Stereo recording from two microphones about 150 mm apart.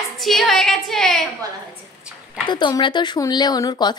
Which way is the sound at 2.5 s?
30° left (ahead or behind).